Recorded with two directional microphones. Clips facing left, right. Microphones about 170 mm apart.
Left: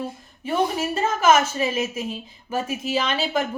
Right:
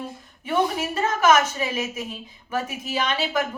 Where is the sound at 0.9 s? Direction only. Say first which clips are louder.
Left 1 dB; 25° left (ahead or behind).